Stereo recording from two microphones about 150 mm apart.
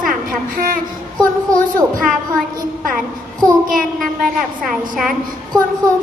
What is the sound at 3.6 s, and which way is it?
Child singing, 65° right (ahead or behind).